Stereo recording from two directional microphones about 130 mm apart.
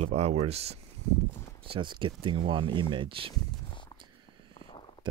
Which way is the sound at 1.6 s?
40° right (ahead or behind).